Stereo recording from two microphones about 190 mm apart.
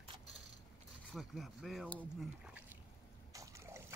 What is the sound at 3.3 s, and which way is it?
Boat, 15° right (ahead or behind).